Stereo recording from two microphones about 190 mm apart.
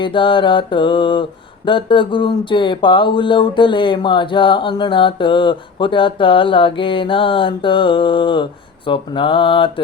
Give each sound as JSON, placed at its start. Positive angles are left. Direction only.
{"t": 0.0, "sound": "speech", "side_deg": 25}